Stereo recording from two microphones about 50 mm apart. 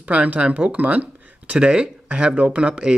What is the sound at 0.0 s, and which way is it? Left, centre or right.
Speech, right.